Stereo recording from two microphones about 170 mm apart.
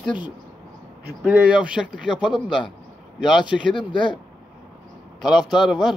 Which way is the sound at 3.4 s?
30° left (ahead or behind).